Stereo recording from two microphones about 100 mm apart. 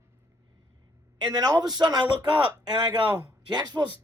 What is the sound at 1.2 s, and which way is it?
Speech, 40° right (ahead or behind).